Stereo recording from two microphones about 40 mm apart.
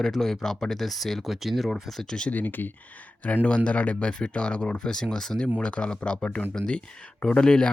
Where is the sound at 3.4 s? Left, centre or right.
Left.